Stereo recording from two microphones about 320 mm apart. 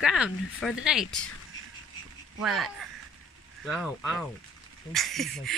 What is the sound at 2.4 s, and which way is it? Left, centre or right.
Speech, centre.